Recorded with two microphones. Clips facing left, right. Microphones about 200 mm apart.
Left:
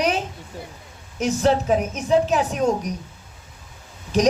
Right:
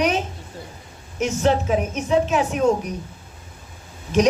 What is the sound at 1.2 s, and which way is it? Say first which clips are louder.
A woman's voice: even; 35° left (ahead or behind).